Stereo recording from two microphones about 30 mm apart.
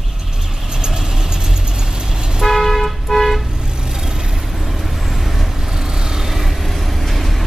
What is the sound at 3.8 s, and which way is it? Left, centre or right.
Vehicle, right.